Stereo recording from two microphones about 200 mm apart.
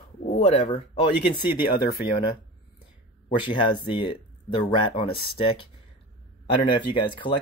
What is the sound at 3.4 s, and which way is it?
Speech, 25° left (ahead or behind).